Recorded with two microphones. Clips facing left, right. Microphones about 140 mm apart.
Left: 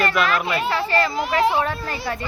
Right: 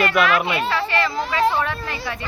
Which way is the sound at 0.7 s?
35° left (ahead or behind).